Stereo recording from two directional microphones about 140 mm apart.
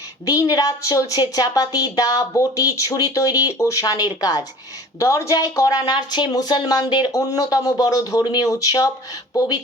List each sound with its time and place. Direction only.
0.3 s speech: 25° left (ahead or behind)